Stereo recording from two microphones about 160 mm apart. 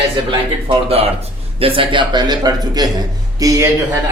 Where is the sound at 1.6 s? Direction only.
35° right (ahead or behind).